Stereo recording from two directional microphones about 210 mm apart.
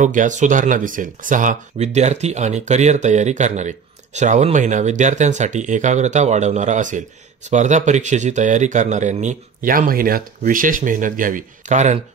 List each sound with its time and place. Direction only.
0.0 s speech: 35° right (ahead or behind)